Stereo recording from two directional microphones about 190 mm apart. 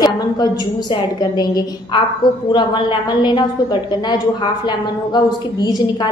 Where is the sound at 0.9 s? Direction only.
20° left (ahead or behind).